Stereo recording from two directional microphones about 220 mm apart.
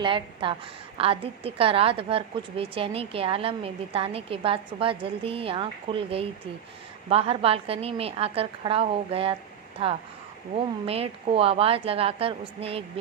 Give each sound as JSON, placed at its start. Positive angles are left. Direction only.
{"t": 0.0, "sound": "a woman's voice", "side_deg": -20}